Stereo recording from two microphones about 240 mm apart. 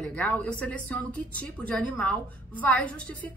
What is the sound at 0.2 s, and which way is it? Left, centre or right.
A woman's voice, centre.